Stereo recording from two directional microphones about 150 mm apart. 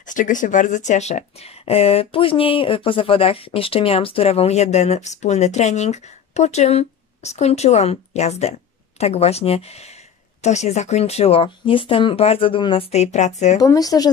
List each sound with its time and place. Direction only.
0.0 s speech: 60° left (ahead or behind)
13.6 s speech: 25° left (ahead or behind)